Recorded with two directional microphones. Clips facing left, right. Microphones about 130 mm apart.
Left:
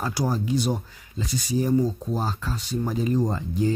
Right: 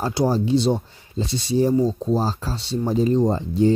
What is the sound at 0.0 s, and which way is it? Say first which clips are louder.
Speech: right 6 dB; 30° right (ahead or behind).